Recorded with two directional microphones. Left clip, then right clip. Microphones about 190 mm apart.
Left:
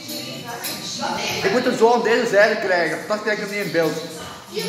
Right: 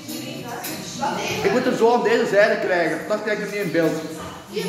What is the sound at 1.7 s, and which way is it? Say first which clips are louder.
A man's voice: left 2 dB; 20° left (ahead or behind).